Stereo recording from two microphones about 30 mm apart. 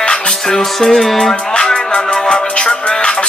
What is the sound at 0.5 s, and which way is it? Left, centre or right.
Music, centre.